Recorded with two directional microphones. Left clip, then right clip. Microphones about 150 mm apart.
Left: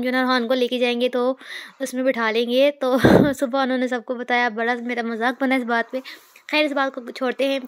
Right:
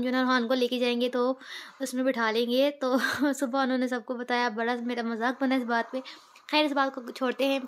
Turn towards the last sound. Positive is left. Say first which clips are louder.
# left 5 dB
turn(degrees=25)  # may be behind; listen again after turning